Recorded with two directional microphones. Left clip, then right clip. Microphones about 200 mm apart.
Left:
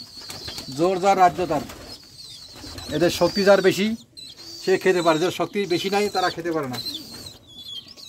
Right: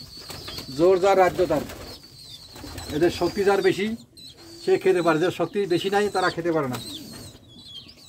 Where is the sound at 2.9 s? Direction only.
60° left (ahead or behind).